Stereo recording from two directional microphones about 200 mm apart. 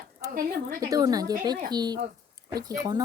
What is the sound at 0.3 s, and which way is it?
Speech, 45° right (ahead or behind).